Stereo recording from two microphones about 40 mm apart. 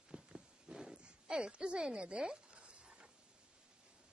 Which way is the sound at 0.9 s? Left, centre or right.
Right.